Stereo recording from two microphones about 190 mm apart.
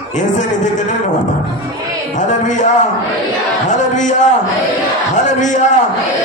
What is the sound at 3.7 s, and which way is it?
A man's voice, 40° left (ahead or behind).